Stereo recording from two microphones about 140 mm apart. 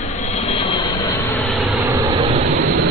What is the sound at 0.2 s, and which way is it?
Vehicle, 50° left (ahead or behind).